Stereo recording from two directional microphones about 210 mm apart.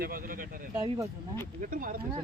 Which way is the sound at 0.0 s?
40° right (ahead or behind).